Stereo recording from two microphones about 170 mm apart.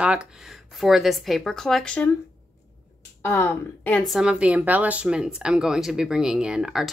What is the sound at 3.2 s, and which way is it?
Speech, 10° left (ahead or behind).